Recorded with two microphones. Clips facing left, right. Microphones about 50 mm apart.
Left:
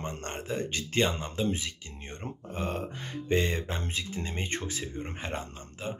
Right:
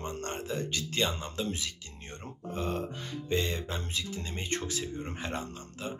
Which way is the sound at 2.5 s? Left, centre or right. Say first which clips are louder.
Right 1 dB; left.